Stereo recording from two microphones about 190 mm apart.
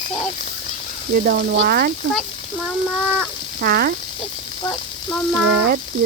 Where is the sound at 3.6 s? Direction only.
50° right (ahead or behind).